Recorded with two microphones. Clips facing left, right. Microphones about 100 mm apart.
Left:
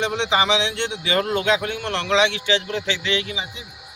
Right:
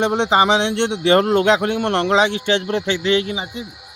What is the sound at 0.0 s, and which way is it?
A man's voice, 45° right (ahead or behind).